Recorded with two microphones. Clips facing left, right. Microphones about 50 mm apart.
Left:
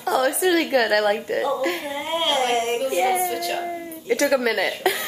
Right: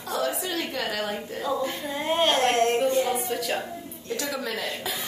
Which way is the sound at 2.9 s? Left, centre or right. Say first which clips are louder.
Left 4 dB; left.